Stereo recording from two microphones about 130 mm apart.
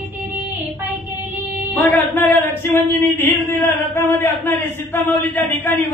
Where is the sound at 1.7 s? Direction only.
15° left (ahead or behind).